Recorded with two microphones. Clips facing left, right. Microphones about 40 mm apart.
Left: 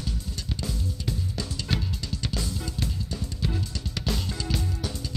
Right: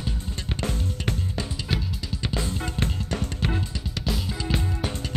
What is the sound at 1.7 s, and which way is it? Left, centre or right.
Drum kit, centre.